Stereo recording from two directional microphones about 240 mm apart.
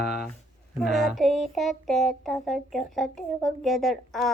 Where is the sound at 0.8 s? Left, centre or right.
Centre.